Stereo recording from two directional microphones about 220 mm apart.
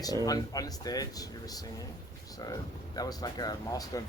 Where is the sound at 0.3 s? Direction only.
15° left (ahead or behind).